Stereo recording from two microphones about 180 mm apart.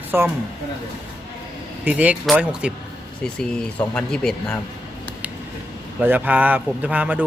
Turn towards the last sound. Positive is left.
turn(degrees=-10)  # may be behind; listen again after turning